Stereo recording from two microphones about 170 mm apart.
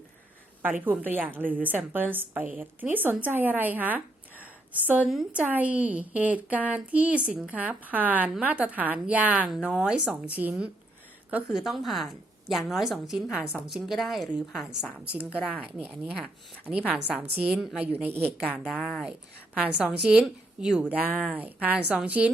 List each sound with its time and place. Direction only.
0.6 s a woman's voice: 10° right (ahead or behind)